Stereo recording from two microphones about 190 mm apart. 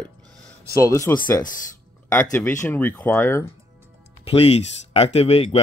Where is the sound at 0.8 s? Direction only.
15° left (ahead or behind).